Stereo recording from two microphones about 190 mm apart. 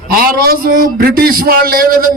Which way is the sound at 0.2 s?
50° right (ahead or behind).